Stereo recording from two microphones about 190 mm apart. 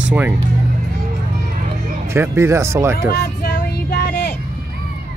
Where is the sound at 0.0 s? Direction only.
5° right (ahead or behind).